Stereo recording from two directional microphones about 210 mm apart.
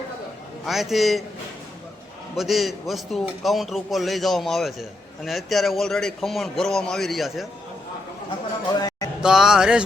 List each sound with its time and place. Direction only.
0.6 s a man's voice: centre (ahead or behind)
2.3 s a man's voice: centre (ahead or behind)
8.7 s a sound: 20° left (ahead or behind)
9.2 s a man's voice: centre (ahead or behind)